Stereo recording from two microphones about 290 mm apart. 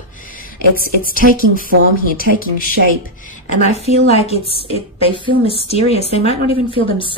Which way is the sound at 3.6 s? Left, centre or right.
Left.